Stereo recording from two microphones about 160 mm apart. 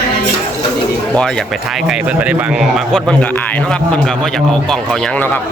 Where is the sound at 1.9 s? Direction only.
5° right (ahead or behind).